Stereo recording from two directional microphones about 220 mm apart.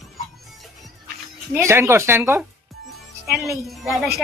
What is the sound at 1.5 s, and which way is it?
Speech, 10° right (ahead or behind).